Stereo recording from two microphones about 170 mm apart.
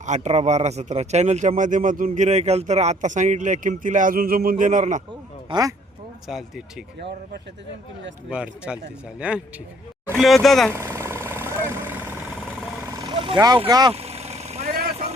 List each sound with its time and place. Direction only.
0.0 s speech: 45° right (ahead or behind)
5.5 s speech: 20° right (ahead or behind)
8.3 s speech: 5° right (ahead or behind)
10.2 s speech: centre (ahead or behind)
10.7 s vehicle: 15° right (ahead or behind)
13.0 s speech: 25° right (ahead or behind)
13.9 s vehicle: 40° right (ahead or behind)